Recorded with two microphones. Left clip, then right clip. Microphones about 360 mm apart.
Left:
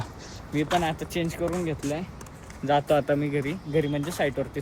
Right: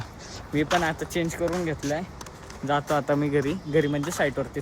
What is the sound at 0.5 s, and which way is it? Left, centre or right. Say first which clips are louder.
Speech: right 1 dB; centre.